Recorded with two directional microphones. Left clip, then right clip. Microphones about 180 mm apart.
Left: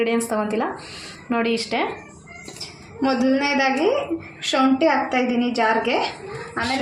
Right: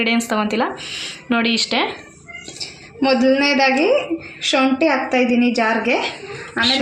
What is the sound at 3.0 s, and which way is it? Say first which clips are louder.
A woman's voice: right 5 dB; 35° right (ahead or behind).